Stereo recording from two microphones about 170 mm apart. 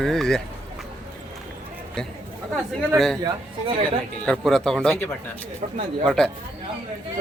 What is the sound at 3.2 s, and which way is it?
Speech, 30° right (ahead or behind).